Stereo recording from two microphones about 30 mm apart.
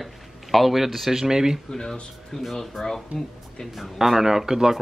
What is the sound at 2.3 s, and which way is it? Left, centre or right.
Speech, centre.